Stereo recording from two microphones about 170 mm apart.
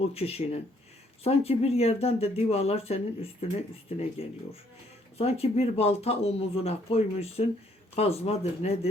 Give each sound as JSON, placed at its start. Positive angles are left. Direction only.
{"t": 0.0, "sound": "speech", "side_deg": 35}